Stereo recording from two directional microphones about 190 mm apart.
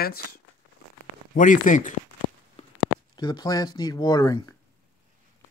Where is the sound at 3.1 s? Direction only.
20° left (ahead or behind).